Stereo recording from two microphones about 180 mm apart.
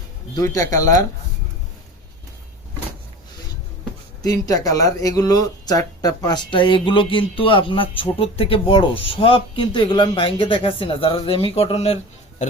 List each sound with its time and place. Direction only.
0.3 s speech: 20° left (ahead or behind)
4.2 s speech: 20° left (ahead or behind)